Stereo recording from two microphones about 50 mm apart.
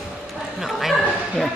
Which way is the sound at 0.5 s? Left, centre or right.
Centre.